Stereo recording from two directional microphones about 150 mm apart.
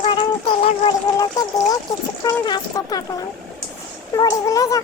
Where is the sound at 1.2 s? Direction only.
25° left (ahead or behind).